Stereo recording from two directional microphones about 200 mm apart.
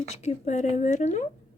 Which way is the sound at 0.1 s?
35° left (ahead or behind).